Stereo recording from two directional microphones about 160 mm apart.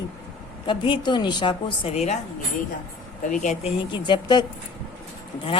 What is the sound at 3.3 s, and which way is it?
Speech, 50° left (ahead or behind).